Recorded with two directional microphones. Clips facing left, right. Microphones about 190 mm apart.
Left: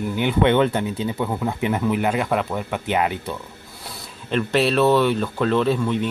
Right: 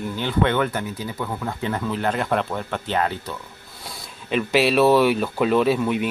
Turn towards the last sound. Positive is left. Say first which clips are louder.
# right 1 dB
turn(degrees=-10)  # may be behind; listen again after turning